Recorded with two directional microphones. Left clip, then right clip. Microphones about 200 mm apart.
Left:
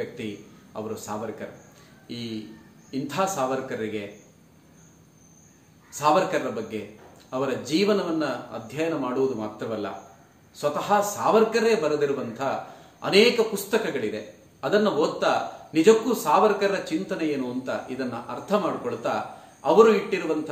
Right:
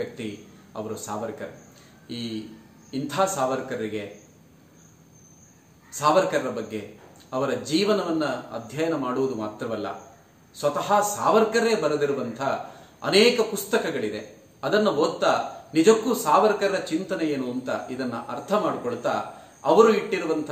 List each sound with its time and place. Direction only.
0.7 s a man's voice: 15° right (ahead or behind)
5.9 s a man's voice: 15° right (ahead or behind)